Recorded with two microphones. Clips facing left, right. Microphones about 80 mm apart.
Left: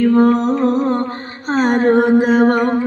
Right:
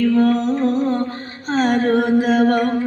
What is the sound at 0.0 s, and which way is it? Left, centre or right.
Mantra, left.